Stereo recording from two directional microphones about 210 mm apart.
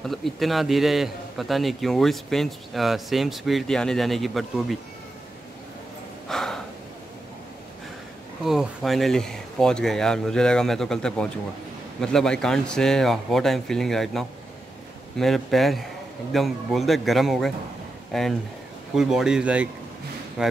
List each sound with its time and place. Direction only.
0.0 s a man's voice: centre (ahead or behind)
6.2 s gasp: centre (ahead or behind)
8.5 s a man's voice: centre (ahead or behind)